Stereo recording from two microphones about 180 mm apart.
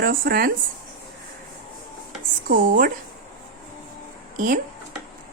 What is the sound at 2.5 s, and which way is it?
Speech, 50° right (ahead or behind).